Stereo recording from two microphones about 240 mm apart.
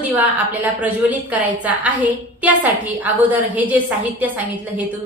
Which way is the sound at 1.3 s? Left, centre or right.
Centre.